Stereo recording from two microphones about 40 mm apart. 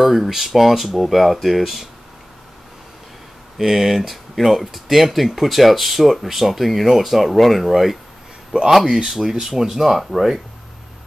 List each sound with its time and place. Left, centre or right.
0.0 s speech: centre
3.5 s speech: centre
8.8 s speech: centre